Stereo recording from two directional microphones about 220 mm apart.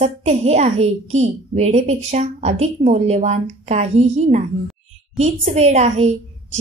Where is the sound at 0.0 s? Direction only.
30° right (ahead or behind).